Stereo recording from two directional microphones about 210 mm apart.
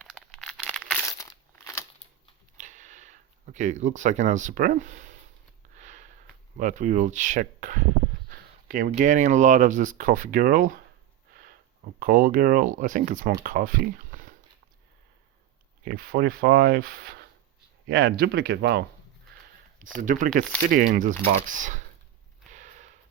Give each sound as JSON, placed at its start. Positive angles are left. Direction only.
{"t": 0.0, "sound": "crumpling", "side_deg": 5}
{"t": 1.0, "sound": "crumpling", "side_deg": 15}
{"t": 2.6, "sound": "speech", "side_deg": -35}
{"t": 5.7, "sound": "sniff", "side_deg": -35}
{"t": 6.6, "sound": "speech", "side_deg": -35}
{"t": 11.9, "sound": "speech", "side_deg": -40}
{"t": 15.8, "sound": "speech", "side_deg": -45}
{"t": 20.0, "sound": "speech", "side_deg": -40}
{"t": 22.5, "sound": "a sound", "side_deg": -35}